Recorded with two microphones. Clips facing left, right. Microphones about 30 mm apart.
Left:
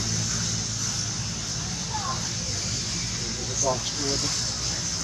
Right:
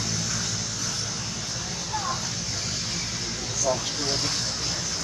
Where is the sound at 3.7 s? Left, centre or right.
Centre.